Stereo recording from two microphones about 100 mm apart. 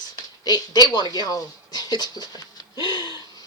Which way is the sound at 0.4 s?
40° left (ahead or behind).